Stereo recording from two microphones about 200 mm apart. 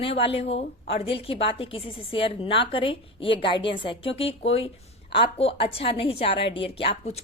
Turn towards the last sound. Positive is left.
turn(degrees=25)  # may be behind; listen again after turning